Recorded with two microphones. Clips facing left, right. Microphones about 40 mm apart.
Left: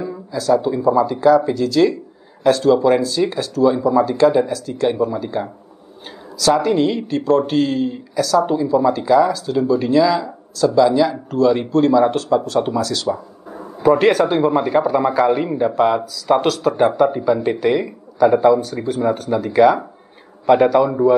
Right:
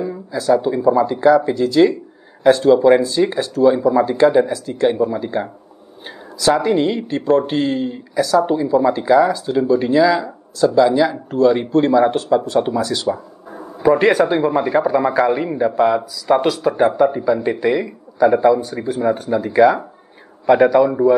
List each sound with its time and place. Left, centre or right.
0.0 s speech: centre
6.5 s speech: centre
14.3 s speech: centre
18.6 s speech: centre